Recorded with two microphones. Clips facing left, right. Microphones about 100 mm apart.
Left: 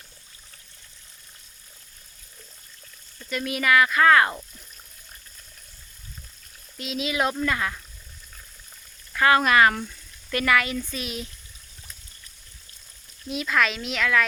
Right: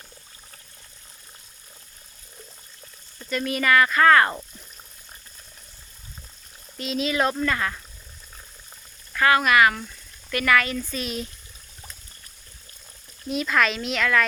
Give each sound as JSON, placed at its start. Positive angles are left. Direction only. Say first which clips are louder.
{"t": 3.2, "sound": "speech", "louder": "right 1 dB", "side_deg": 10}
{"t": 6.7, "sound": "speech", "louder": "right 2 dB", "side_deg": 5}
{"t": 9.1, "sound": "speech", "louder": "even", "side_deg": 25}
{"t": 10.3, "sound": "speech", "louder": "right 1 dB", "side_deg": 20}
{"t": 13.2, "sound": "a woman's voice", "louder": "right 2 dB", "side_deg": 0}